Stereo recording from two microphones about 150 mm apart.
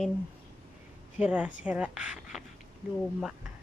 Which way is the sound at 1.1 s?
10° right (ahead or behind).